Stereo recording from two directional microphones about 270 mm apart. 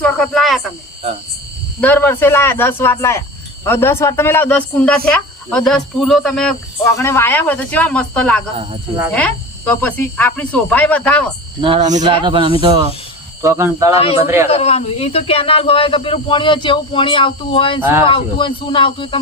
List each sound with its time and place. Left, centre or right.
0.0 s speech: centre
1.8 s speech: centre
11.6 s speech: centre
14.5 s speech: left